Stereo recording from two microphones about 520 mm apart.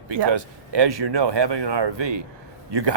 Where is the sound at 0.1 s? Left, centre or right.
Right.